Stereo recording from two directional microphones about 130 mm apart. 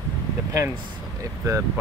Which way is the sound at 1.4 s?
25° right (ahead or behind).